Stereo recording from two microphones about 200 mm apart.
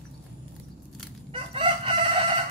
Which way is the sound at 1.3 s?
30° right (ahead or behind).